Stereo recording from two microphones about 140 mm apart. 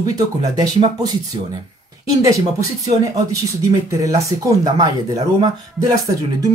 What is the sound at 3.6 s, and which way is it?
Speech, 20° right (ahead or behind).